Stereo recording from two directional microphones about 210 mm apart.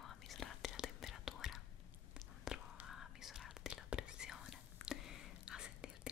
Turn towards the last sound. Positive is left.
turn(degrees=-5)  # may be behind; listen again after turning